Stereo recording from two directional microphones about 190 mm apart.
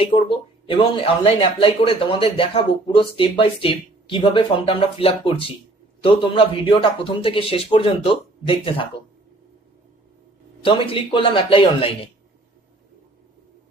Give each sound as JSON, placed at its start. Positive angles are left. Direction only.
{"t": 0.0, "sound": "speech", "side_deg": 30}
{"t": 10.6, "sound": "speech", "side_deg": 30}